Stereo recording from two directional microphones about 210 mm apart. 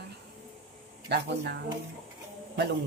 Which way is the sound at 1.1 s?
55° right (ahead or behind).